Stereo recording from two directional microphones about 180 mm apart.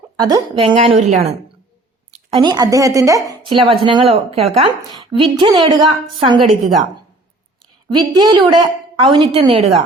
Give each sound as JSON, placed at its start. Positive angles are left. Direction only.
{"t": 0.2, "sound": "speech", "side_deg": -20}
{"t": 2.0, "sound": "a sound", "side_deg": -40}
{"t": 2.4, "sound": "a woman's voice", "side_deg": -20}
{"t": 3.5, "sound": "a woman's voice", "side_deg": -30}
{"t": 7.9, "sound": "a woman's voice", "side_deg": -25}